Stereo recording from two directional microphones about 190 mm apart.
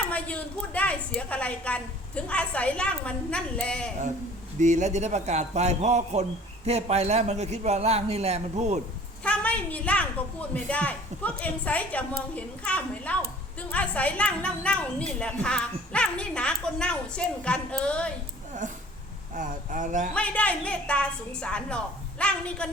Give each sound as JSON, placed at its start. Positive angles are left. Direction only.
{"t": 0.1, "sound": "a woman's voice", "side_deg": 5}
{"t": 4.6, "sound": "a man's voice", "side_deg": -40}
{"t": 9.2, "sound": "a woman's voice", "side_deg": 5}
{"t": 18.6, "sound": "a man's voice", "side_deg": -40}
{"t": 20.1, "sound": "speech", "side_deg": 5}